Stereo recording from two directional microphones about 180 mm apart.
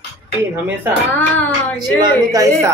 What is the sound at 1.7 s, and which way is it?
Speech, 20° right (ahead or behind).